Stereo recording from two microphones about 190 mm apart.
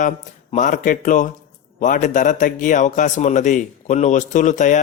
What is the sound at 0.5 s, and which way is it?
A man's voice, 40° left (ahead or behind).